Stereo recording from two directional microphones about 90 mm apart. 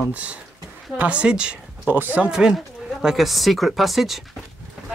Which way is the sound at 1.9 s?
20° right (ahead or behind).